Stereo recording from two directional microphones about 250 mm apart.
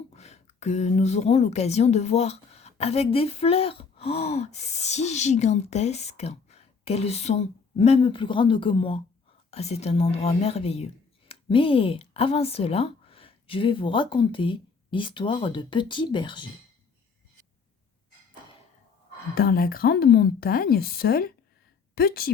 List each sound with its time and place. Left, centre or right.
0.1 s a woman's voice: left
19.3 s a woman's voice: left